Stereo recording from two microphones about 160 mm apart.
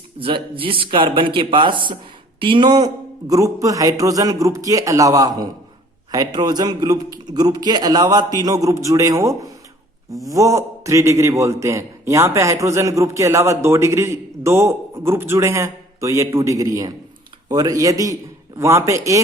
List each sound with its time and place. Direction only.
0.2 s a man's voice: 35° right (ahead or behind)